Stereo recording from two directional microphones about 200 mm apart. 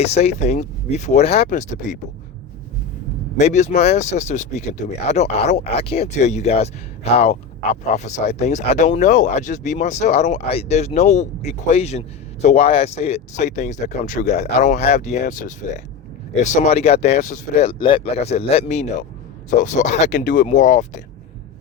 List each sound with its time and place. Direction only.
0.0 s speech: 30° left (ahead or behind)
3.3 s speech: 35° left (ahead or behind)